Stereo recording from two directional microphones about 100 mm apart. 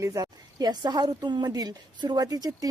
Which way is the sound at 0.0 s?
35° right (ahead or behind).